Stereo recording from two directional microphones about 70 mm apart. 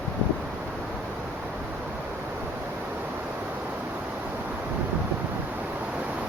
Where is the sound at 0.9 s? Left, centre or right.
Centre.